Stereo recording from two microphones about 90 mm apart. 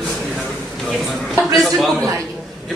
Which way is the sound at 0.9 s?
Centre (ahead or behind).